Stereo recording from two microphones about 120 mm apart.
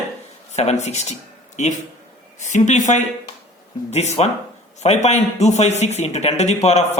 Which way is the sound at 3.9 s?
70° left (ahead or behind).